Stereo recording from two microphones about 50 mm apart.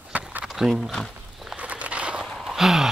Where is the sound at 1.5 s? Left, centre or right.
Right.